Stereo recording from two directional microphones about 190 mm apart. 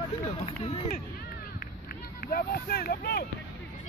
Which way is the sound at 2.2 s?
50° left (ahead or behind).